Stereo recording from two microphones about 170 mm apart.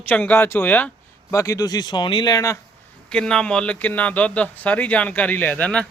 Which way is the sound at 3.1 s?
5° left (ahead or behind).